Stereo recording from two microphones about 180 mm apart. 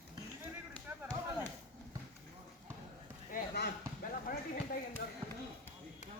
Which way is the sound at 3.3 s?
65° left (ahead or behind).